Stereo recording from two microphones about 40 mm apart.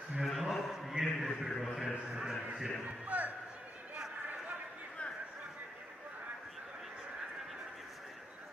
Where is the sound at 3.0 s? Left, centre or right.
Right.